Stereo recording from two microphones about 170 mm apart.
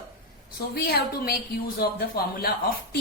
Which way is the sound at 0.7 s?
65° left (ahead or behind).